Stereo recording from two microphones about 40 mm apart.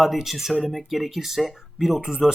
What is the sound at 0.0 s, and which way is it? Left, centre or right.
Speech, centre.